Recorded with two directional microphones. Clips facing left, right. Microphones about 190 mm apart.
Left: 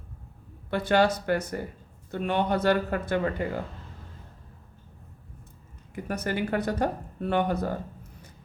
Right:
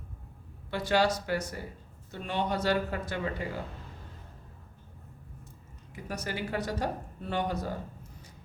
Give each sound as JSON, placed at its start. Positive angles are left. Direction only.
{"t": 0.7, "sound": "speech", "side_deg": 55}
{"t": 5.9, "sound": "speech", "side_deg": 55}